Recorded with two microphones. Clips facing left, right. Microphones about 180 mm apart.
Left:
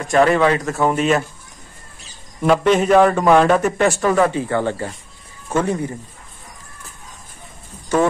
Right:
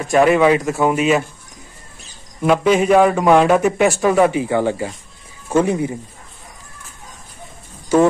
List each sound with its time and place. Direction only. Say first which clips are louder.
0.1 s a man's voice: right 2 dB; 10° right (ahead or behind)
2.4 s a man's voice: right 1 dB; 5° right (ahead or behind)